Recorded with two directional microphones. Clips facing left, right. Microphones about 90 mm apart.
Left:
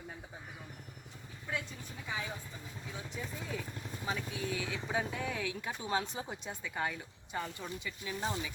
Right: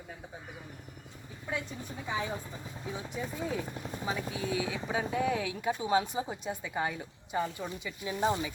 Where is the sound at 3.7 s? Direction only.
15° right (ahead or behind).